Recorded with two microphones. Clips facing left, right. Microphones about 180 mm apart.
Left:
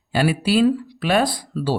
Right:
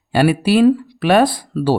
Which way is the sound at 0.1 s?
60° right (ahead or behind).